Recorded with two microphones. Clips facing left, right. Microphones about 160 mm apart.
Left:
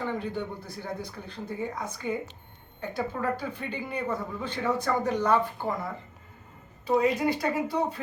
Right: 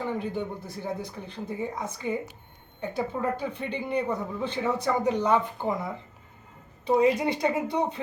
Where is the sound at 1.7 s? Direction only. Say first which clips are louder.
Right 1 dB; 10° right (ahead or behind).